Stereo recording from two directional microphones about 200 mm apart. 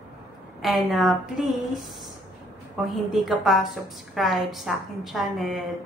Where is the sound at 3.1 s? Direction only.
Centre (ahead or behind).